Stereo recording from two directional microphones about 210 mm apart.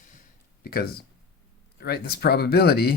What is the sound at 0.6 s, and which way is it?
Speech, 45° left (ahead or behind).